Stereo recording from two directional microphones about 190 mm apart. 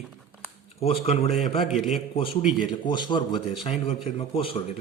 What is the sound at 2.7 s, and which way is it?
A man's voice, 25° left (ahead or behind).